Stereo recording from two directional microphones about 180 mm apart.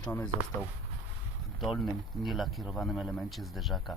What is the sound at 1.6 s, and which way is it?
Speech, centre (ahead or behind).